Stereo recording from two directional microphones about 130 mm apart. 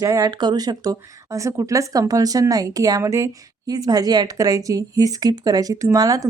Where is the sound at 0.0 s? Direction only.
30° right (ahead or behind).